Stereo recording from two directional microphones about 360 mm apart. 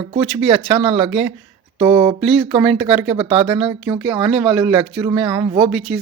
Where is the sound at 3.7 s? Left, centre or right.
Centre.